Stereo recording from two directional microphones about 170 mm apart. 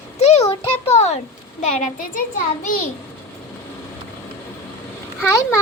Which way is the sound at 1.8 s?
50° left (ahead or behind).